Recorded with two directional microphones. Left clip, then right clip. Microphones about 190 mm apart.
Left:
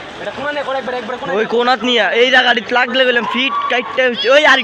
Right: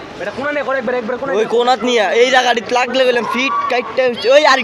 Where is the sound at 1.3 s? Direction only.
35° right (ahead or behind).